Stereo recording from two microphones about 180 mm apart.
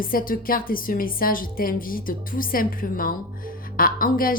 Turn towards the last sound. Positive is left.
turn(degrees=50)  # may be behind; listen again after turning